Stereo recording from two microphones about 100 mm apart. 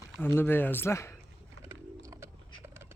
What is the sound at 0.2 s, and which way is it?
Speech, 20° left (ahead or behind).